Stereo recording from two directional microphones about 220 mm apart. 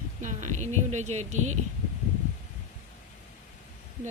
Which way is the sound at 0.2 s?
35° right (ahead or behind).